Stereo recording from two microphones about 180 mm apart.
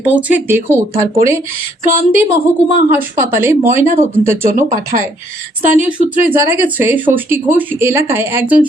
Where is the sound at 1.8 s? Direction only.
50° right (ahead or behind).